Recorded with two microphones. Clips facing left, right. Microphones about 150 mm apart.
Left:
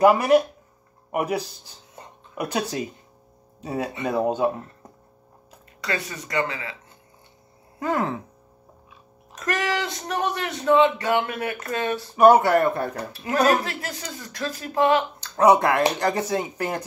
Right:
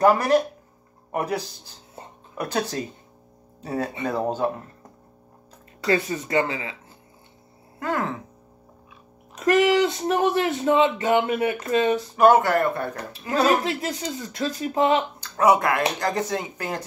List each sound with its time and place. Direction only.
0.0 s speech: 10° left (ahead or behind)
5.9 s speech: 30° right (ahead or behind)
9.3 s speech: 25° right (ahead or behind)
12.2 s speech: 20° left (ahead or behind)
13.4 s speech: 20° right (ahead or behind)
15.3 s speech: 25° left (ahead or behind)